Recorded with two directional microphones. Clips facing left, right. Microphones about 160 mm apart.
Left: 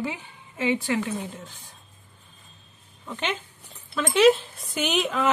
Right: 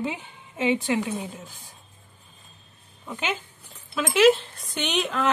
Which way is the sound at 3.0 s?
5° right (ahead or behind).